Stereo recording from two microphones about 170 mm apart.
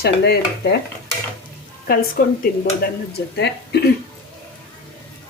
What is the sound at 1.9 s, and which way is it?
Speech, 60° left (ahead or behind).